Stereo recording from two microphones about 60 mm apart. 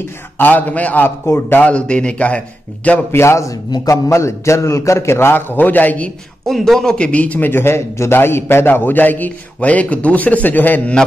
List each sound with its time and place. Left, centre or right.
0.4 s speech: left
1.0 s a man's voice: left
1.6 s speech: left
3.1 s a man's voice: left
6.4 s speech: centre; by 11.0 s left